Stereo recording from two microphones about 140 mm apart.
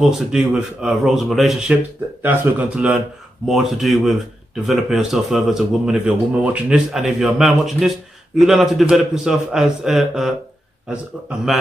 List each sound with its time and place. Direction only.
0.0 s a man's voice: 5° right (ahead or behind)